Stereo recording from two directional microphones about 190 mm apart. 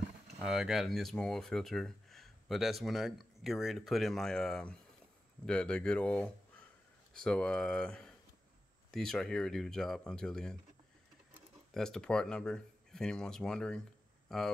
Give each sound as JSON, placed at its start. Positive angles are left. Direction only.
{"t": 0.4, "sound": "speech", "side_deg": 0}
{"t": 11.7, "sound": "speech", "side_deg": 5}